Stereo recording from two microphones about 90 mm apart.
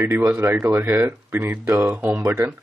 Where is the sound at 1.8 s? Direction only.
15° right (ahead or behind).